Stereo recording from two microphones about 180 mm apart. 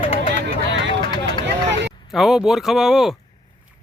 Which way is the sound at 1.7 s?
80° right.